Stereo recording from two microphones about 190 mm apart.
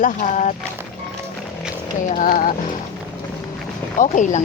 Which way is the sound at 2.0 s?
40° left (ahead or behind).